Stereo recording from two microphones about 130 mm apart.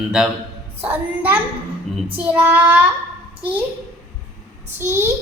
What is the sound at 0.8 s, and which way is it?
Child singing, 15° right (ahead or behind).